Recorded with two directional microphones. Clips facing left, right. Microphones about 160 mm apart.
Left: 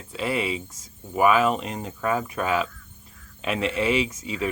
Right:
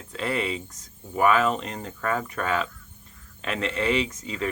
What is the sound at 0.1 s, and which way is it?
Speech, 10° left (ahead or behind).